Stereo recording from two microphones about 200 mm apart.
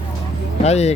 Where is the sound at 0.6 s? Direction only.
30° left (ahead or behind).